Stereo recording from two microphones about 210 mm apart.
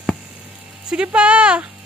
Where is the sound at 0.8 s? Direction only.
5° right (ahead or behind).